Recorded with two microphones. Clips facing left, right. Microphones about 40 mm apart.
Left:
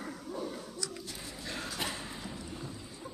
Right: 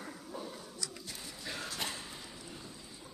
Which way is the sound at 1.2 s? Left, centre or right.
Centre.